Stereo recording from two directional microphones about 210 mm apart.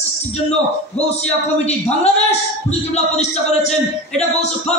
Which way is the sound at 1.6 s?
30° left (ahead or behind).